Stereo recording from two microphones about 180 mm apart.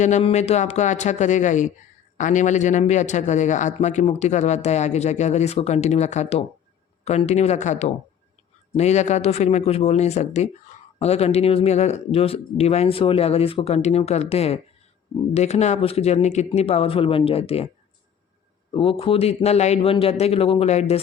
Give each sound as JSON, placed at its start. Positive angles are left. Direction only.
{"t": 0.0, "sound": "speech", "side_deg": 40}
{"t": 18.7, "sound": "speech", "side_deg": 30}